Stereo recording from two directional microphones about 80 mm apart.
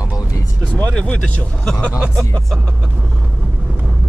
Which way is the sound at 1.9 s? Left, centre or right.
Centre.